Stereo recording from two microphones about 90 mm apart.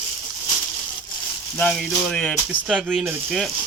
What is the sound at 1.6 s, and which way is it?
Speech, 10° left (ahead or behind).